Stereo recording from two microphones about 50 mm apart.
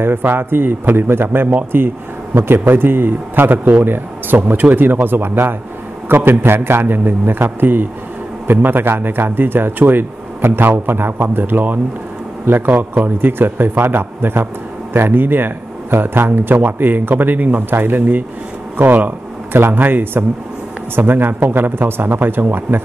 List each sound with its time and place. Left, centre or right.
0.0 s a man's voice: right
12.7 s a man's voice: right
13.2 s speech: right
19.5 s speech: right